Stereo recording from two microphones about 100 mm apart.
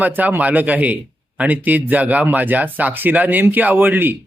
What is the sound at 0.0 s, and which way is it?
Speech, 15° right (ahead or behind).